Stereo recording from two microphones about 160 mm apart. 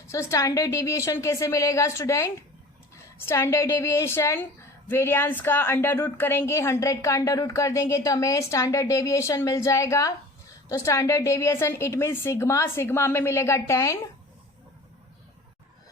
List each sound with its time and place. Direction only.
0.1 s a woman's voice: 20° left (ahead or behind)